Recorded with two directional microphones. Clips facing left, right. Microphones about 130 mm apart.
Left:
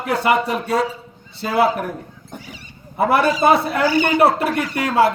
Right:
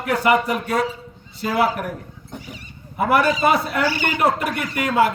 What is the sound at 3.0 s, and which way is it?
A man's voice, 30° left (ahead or behind).